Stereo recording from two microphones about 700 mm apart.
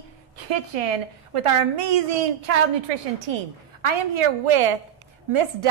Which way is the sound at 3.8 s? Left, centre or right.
Right.